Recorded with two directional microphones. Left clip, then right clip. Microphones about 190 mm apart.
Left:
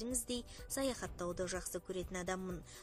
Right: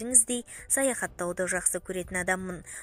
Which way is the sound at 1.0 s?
25° right (ahead or behind).